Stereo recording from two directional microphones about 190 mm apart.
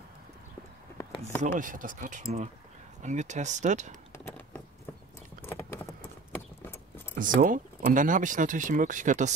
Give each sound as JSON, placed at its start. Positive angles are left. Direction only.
{"t": 1.4, "sound": "speech", "side_deg": -45}
{"t": 5.4, "sound": "clip-clop", "side_deg": 15}
{"t": 7.2, "sound": "speech", "side_deg": -45}